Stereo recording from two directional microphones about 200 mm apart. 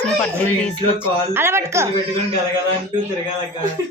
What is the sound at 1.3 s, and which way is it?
Speech, 15° right (ahead or behind).